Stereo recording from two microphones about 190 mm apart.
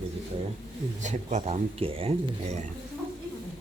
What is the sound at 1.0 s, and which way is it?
Speech, 35° right (ahead or behind).